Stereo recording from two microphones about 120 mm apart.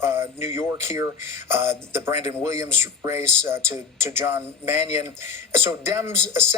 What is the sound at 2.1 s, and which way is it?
Speech, 70° left (ahead or behind).